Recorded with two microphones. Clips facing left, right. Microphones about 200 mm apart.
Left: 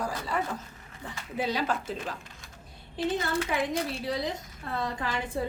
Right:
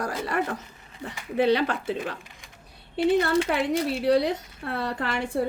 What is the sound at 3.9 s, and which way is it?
A woman's voice, 65° right (ahead or behind).